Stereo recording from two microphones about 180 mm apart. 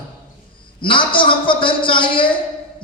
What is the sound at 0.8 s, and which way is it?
A man's voice, 25° left (ahead or behind).